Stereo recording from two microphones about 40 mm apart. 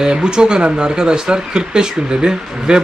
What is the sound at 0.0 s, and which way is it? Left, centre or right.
Speech, right.